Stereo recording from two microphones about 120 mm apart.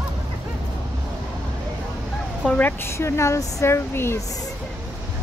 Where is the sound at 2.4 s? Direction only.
5° left (ahead or behind).